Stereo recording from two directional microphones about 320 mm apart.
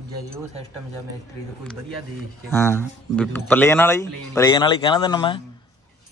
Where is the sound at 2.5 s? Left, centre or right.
Centre.